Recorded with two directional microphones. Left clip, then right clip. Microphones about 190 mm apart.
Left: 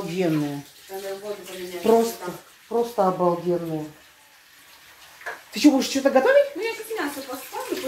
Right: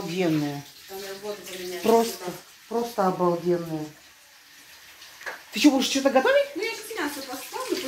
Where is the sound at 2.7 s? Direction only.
10° right (ahead or behind).